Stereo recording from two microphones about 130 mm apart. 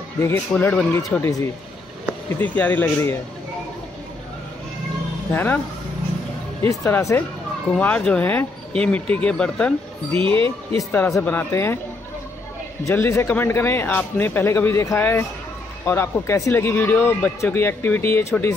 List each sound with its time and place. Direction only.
0.2 s a man's voice: 15° left (ahead or behind)
2.3 s a man's voice: 15° left (ahead or behind)
5.3 s a man's voice: 15° left (ahead or behind)
6.6 s speech: 20° left (ahead or behind)
7.7 s a man's voice: 10° left (ahead or behind)
10.1 s a man's voice: 40° right (ahead or behind)
10.8 s a man's voice: 20° left (ahead or behind)
12.8 s a man's voice: 20° left (ahead or behind)